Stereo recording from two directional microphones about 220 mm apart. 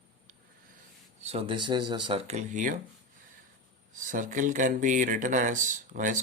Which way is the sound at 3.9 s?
35° right (ahead or behind).